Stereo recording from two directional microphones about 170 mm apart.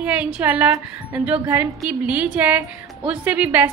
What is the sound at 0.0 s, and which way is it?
A woman's voice, 10° right (ahead or behind).